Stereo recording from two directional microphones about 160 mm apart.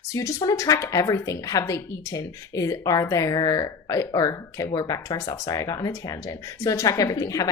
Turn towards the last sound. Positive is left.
turn(degrees=20)  # may be behind; listen again after turning